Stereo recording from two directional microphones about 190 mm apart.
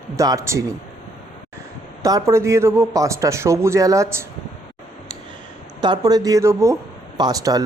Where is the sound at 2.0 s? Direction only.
15° right (ahead or behind).